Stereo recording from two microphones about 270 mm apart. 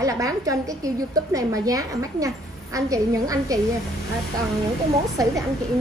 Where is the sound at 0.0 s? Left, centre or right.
Centre.